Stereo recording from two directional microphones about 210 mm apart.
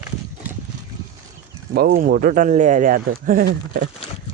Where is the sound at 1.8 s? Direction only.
45° right (ahead or behind).